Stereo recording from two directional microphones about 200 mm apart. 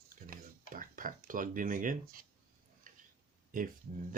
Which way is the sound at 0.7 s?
40° right (ahead or behind).